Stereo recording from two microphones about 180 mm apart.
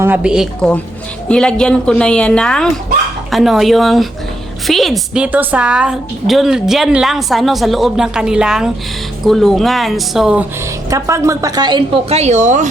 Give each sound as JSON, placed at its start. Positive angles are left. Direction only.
{"t": 0.0, "sound": "a woman's voice", "side_deg": -10}
{"t": 10.8, "sound": "a woman's voice", "side_deg": -20}